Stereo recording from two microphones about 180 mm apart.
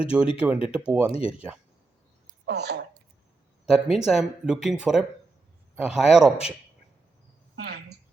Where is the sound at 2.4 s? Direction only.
65° right (ahead or behind).